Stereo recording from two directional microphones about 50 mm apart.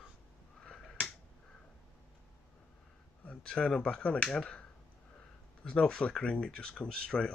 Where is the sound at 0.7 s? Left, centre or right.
Centre.